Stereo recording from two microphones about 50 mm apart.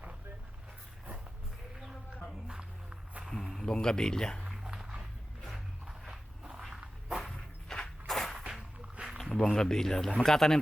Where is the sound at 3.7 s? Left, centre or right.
Centre.